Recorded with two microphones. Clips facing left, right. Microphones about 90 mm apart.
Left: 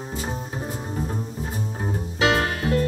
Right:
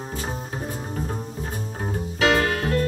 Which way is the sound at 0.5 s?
10° left (ahead or behind).